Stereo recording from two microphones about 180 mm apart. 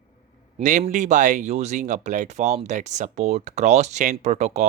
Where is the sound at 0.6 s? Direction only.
45° right (ahead or behind).